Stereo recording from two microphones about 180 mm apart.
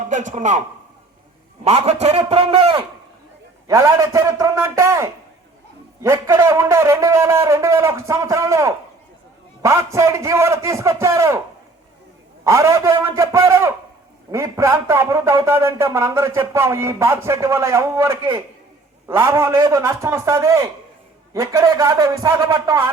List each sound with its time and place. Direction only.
0.1 s a man's voice: 45° right (ahead or behind)
1.6 s a man's voice: 35° right (ahead or behind)
3.7 s a man's voice: 15° right (ahead or behind)
12.5 s a man's voice: 15° right (ahead or behind)